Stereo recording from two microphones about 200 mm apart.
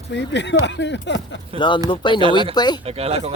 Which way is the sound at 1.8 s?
25° left (ahead or behind).